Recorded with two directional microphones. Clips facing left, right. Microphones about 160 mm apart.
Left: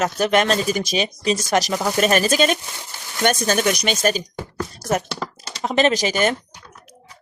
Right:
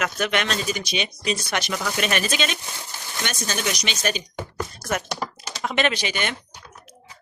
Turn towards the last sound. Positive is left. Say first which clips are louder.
# left 7 dB
turn(degrees=40)  # may be behind; listen again after turning